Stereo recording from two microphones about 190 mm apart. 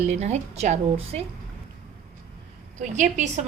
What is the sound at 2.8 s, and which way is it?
Speech, 40° right (ahead or behind).